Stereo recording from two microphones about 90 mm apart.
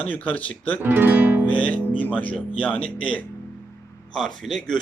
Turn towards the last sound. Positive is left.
turn(degrees=5)  # may be behind; listen again after turning